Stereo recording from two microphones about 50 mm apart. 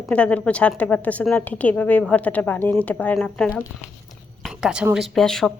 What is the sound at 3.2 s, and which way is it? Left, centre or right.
Speech, centre.